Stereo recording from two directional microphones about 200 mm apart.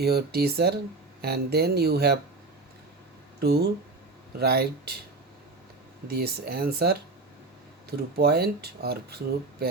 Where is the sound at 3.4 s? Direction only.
50° right (ahead or behind).